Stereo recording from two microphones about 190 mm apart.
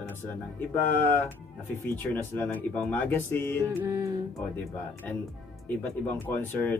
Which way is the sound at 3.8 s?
15° right (ahead or behind).